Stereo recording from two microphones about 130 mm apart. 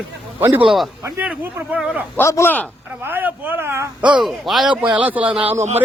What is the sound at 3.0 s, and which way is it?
Speech, 15° right (ahead or behind).